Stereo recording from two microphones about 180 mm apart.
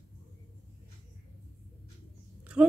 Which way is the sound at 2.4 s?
5° right (ahead or behind).